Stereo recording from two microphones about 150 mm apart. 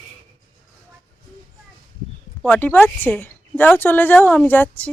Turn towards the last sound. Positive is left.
turn(degrees=10)  # may be behind; listen again after turning